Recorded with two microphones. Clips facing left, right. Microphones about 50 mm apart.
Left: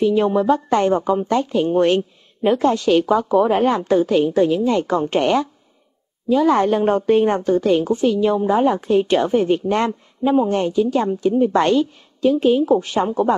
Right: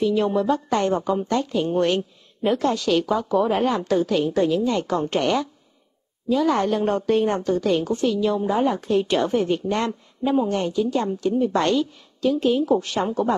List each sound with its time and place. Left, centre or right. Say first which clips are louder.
0.0 s a woman's voice: left 4 dB; centre
9.5 s a woman's voice: left 5 dB; left